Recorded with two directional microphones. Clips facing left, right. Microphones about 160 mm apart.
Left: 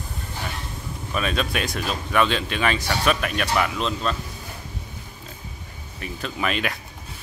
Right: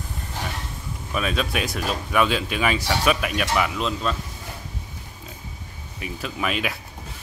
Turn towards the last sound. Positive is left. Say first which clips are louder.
# even
turn(degrees=-5)  # may be behind; listen again after turning